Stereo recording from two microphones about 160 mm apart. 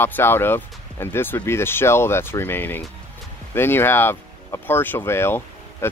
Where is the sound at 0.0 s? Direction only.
15° left (ahead or behind).